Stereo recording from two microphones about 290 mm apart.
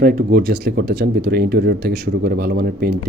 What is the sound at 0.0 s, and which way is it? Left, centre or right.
Speech, right.